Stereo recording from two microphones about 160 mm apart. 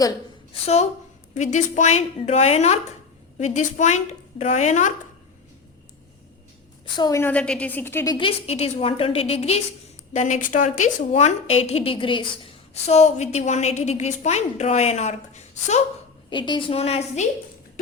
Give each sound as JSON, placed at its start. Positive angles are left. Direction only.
{"t": 0.5, "sound": "a woman's voice", "side_deg": 40}
{"t": 6.9, "sound": "a woman's voice", "side_deg": 25}
{"t": 7.2, "sound": "a woman's voice", "side_deg": 10}
{"t": 8.3, "sound": "a woman's voice", "side_deg": 40}
{"t": 11.1, "sound": "a woman's voice", "side_deg": 40}
{"t": 16.3, "sound": "a woman's voice", "side_deg": 30}